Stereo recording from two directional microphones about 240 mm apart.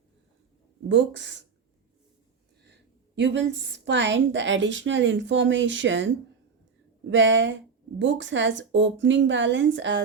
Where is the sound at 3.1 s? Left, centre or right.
Right.